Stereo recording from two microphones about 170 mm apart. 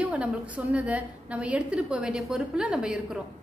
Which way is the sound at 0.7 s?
10° right (ahead or behind).